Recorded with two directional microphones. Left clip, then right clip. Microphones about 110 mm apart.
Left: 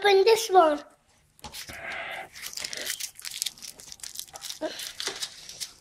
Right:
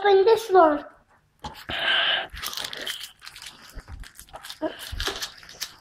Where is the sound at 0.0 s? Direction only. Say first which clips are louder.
Right 2 dB; 70° left (ahead or behind).